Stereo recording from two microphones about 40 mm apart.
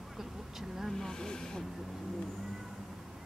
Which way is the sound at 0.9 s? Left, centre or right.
Centre.